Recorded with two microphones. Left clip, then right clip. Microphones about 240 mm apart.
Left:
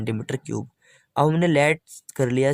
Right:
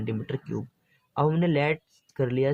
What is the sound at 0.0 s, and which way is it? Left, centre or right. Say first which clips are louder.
Speech: left 4 dB; left.